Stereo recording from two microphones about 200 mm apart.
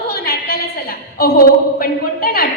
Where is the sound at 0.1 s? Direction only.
45° left (ahead or behind).